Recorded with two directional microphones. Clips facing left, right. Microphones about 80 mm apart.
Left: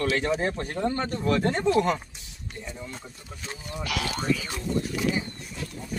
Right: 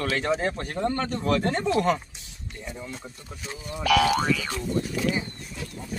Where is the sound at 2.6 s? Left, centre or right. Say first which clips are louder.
Right 3 dB; centre.